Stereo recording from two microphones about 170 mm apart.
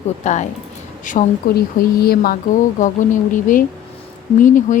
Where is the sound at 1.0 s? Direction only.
55° left (ahead or behind).